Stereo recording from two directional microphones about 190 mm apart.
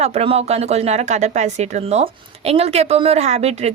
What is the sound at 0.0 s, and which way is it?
A woman's voice, 35° right (ahead or behind).